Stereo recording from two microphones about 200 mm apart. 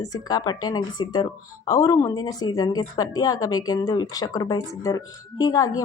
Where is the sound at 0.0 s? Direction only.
20° left (ahead or behind).